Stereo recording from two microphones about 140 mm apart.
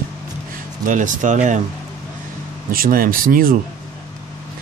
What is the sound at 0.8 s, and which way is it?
Speech, 65° right (ahead or behind).